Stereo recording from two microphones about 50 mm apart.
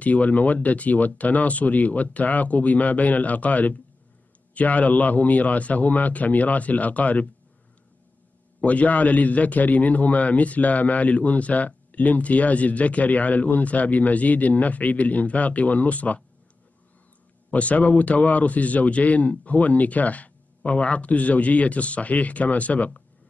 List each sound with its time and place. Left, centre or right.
0.0 s speech: left
8.5 s a man's voice: left
17.5 s a man's voice: left